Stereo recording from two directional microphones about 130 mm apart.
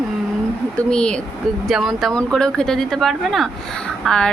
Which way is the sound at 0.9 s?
5° left (ahead or behind).